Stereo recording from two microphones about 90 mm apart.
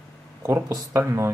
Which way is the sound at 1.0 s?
30° right (ahead or behind).